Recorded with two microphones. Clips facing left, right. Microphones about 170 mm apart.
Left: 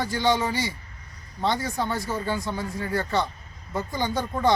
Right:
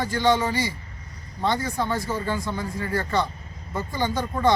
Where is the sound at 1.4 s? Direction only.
10° left (ahead or behind).